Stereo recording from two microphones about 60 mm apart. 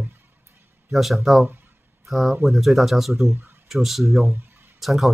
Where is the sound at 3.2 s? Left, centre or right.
Right.